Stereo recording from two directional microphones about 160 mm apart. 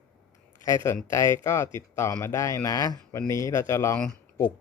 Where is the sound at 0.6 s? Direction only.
20° left (ahead or behind).